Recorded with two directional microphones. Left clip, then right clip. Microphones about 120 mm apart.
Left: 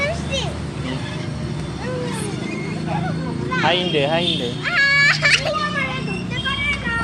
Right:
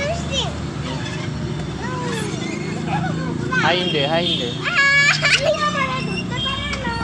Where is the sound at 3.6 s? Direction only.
70° left (ahead or behind).